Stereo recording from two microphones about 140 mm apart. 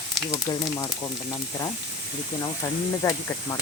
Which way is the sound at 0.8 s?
20° left (ahead or behind).